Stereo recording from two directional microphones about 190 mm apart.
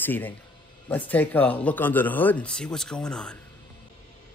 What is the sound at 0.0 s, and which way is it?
A man's voice, 10° left (ahead or behind).